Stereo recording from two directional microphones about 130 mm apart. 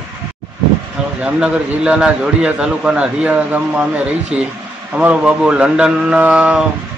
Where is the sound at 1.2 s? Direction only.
10° right (ahead or behind).